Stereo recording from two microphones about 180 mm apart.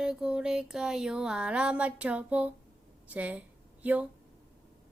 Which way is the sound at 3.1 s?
10° right (ahead or behind).